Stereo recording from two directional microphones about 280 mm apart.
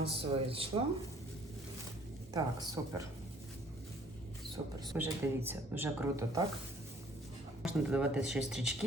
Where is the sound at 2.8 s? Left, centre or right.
Centre.